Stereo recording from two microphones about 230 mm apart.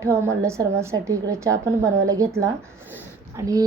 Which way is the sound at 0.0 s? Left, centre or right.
Centre.